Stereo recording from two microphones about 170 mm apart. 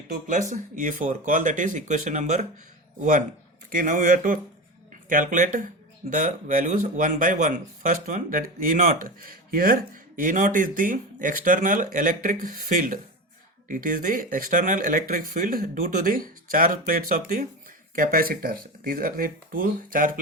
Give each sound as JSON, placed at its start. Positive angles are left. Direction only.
{"t": 0.1, "sound": "speech", "side_deg": -50}